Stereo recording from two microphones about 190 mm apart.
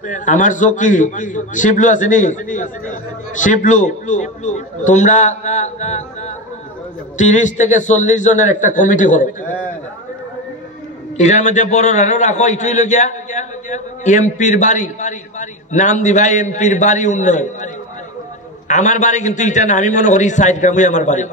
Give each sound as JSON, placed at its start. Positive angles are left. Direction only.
{"t": 0.0, "sound": "a man's voice", "side_deg": 40}
{"t": 9.4, "sound": "a man's voice", "side_deg": 10}
{"t": 11.1, "sound": "a man's voice", "side_deg": 40}
{"t": 18.7, "sound": "a man's voice", "side_deg": 40}